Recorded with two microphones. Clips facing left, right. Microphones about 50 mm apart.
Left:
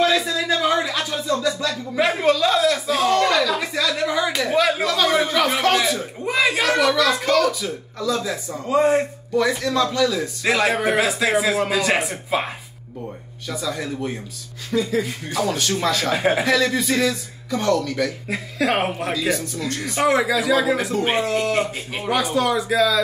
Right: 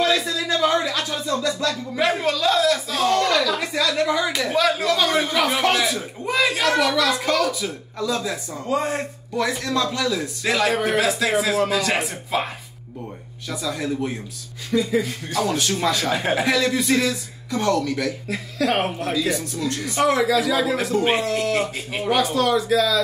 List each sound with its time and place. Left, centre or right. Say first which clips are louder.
0.0 s music: left 2 dB; centre
3.5 s a sound: right 1 dB; centre
4.8 s speech: left 1 dB; centre
10.4 s speech: left 2 dB; centre
13.5 s speech: right 1 dB; centre
16.2 s speech: left 3 dB; centre
16.4 s speech: left 1 dB; centre
18.3 s speech: right 1 dB; centre
19.1 s speech: even; centre